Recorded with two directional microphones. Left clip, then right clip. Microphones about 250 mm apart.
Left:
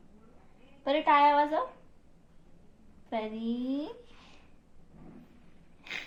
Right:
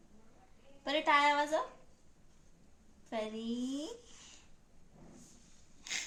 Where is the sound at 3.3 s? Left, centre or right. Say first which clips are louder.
Left 5 dB; centre.